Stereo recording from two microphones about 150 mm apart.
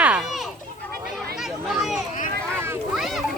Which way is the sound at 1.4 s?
Centre (ahead or behind).